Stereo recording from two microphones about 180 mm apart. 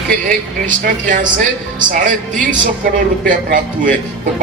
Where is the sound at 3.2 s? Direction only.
50° right (ahead or behind).